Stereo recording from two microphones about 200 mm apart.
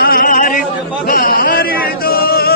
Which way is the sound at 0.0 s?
45° left (ahead or behind).